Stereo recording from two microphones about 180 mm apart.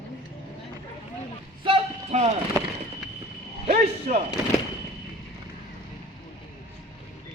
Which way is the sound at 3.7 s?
40° right (ahead or behind).